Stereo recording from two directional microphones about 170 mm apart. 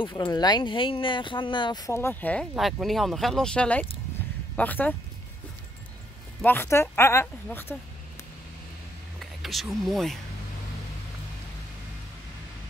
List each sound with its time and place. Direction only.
0.0 s a woman's voice: 25° left (ahead or behind); by 4.9 s 10° left (ahead or behind)
6.4 s a woman's voice: 10° left (ahead or behind)
9.2 s speech: centre (ahead or behind)